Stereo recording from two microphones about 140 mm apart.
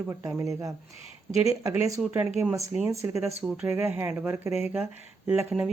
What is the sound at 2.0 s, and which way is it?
Speech, 10° right (ahead or behind).